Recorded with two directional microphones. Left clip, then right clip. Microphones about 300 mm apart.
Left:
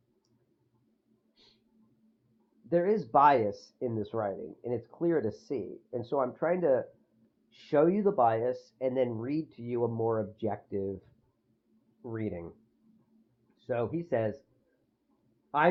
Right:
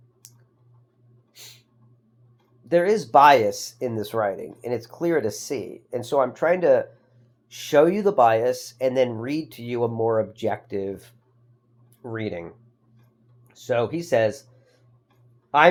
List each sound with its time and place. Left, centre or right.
1.3 s a sound: centre
2.6 s speech: centre
13.7 s speech: centre